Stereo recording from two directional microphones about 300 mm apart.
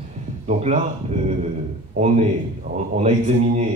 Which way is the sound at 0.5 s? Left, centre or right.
Right.